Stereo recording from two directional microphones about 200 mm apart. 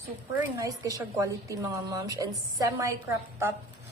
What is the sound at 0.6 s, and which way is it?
A woman's voice, 15° right (ahead or behind).